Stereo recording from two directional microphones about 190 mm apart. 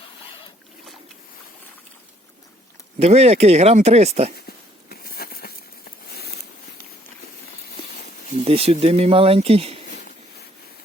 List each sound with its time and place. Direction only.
3.0 s speech: 35° right (ahead or behind)
4.4 s a sound: 50° left (ahead or behind)
8.4 s speech: 30° right (ahead or behind)